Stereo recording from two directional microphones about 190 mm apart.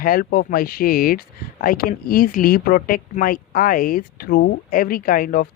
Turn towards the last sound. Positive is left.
turn(degrees=50)  # may be behind; listen again after turning